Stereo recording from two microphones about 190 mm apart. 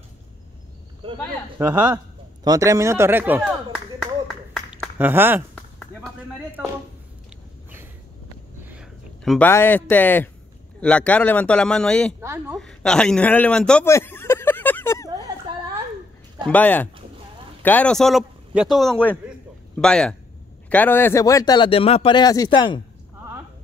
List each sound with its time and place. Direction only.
1.6 s speech: 5° right (ahead or behind)
2.4 s speech: 20° right (ahead or behind)
4.7 s speech: 10° right (ahead or behind)
8.6 s a sound: 5° right (ahead or behind)
9.5 s a man's voice: 10° left (ahead or behind)
12.2 s speech: 15° right (ahead or behind)
12.5 s a sound: 5° left (ahead or behind)
16.4 s a man's voice: 10° left (ahead or behind); by 22.8 s 25° left (ahead or behind)